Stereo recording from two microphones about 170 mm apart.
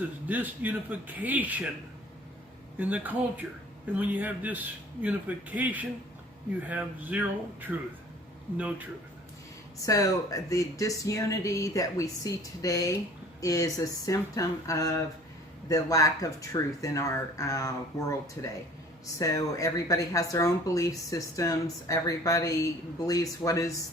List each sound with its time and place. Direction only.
0.3 s a man's voice: 10° right (ahead or behind)
2.7 s a man's voice: 10° right (ahead or behind)
9.8 s speech: 20° left (ahead or behind)